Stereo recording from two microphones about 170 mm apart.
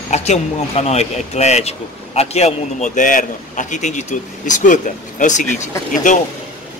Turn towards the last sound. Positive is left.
turn(degrees=50)  # may be behind; listen again after turning